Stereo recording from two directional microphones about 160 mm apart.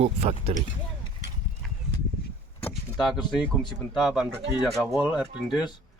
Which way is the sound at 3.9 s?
Centre (ahead or behind).